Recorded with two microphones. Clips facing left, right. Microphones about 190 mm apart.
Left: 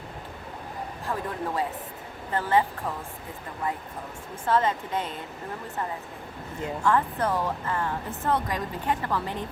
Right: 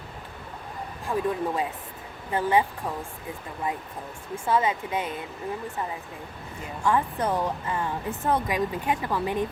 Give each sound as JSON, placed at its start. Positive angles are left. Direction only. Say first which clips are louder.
{"t": 1.0, "sound": "speech", "louder": "right 5 dB", "side_deg": -15}
{"t": 4.4, "sound": "speech", "louder": "even", "side_deg": -10}
{"t": 6.8, "sound": "speech", "louder": "even", "side_deg": -15}